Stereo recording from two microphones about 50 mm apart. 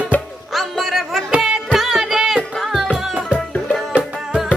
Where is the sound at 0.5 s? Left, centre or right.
Centre.